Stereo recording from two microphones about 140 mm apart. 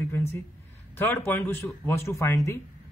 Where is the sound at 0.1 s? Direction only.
20° left (ahead or behind).